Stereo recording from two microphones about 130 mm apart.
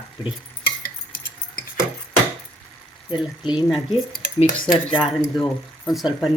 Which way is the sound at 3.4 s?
5° right (ahead or behind).